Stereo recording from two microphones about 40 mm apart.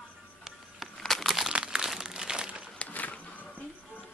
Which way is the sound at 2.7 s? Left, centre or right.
Left.